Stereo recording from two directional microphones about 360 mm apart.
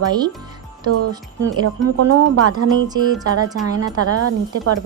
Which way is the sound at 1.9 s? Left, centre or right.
Right.